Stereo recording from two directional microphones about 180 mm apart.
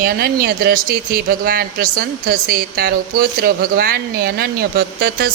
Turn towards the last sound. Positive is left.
turn(degrees=-60)  # may be behind; listen again after turning